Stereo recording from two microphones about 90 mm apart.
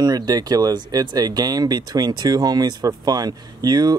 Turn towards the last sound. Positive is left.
turn(degrees=-50)  # may be behind; listen again after turning